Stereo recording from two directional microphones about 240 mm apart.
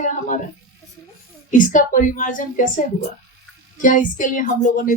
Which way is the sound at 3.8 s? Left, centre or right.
Left.